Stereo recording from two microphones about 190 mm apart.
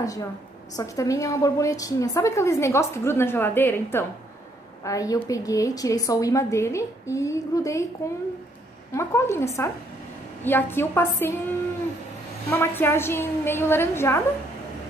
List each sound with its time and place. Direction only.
0.0 s a woman's voice: 20° left (ahead or behind)
8.9 s a woman's voice: 15° left (ahead or behind)
12.4 s a woman's voice: 10° left (ahead or behind)